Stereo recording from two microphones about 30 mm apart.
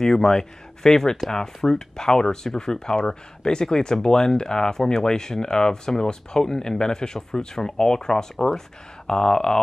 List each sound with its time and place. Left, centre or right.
0.0 s speech: centre